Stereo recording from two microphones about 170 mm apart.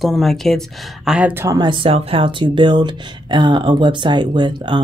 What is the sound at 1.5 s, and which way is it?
Speech, 30° right (ahead or behind).